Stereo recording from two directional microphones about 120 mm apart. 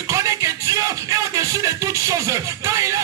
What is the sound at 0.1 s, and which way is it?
Music, 30° right (ahead or behind).